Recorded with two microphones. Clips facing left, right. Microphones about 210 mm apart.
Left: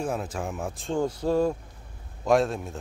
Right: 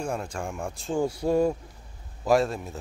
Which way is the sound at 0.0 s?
Centre (ahead or behind).